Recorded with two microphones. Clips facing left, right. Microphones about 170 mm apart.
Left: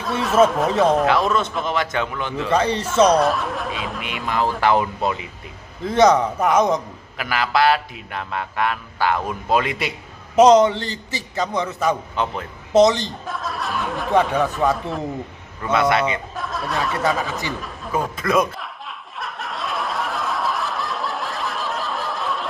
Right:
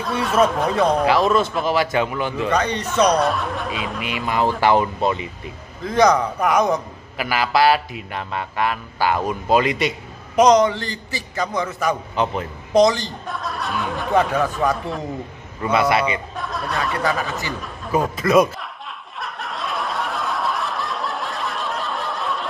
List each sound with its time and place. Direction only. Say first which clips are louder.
0.0 s speech: left 2 dB; centre (ahead or behind)
2.5 s a man's voice: left 4 dB; 30° left (ahead or behind)
3.1 s speech: left 1 dB; centre (ahead or behind)
5.9 s a man's voice: left 1 dB; 25° left (ahead or behind)
7.2 s speech: right 1 dB; 5° right (ahead or behind)
10.3 s a man's voice: left 2 dB; 25° left (ahead or behind)
11.9 s a man's voice: right 1 dB; 10° right (ahead or behind)
12.7 s a man's voice: left 1 dB; 25° left (ahead or behind)
13.3 s speech: right 1 dB; centre (ahead or behind)
19.1 s snicker: even; centre (ahead or behind)